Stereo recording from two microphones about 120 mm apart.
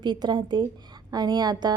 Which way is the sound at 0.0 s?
40° right (ahead or behind).